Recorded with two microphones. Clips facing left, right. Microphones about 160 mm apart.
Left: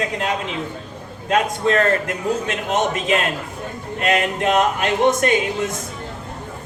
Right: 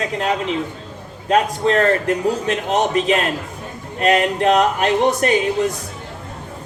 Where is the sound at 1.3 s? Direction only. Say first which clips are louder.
Right 2 dB; 35° right (ahead or behind).